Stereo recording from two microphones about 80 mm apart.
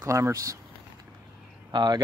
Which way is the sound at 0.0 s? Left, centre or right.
Right.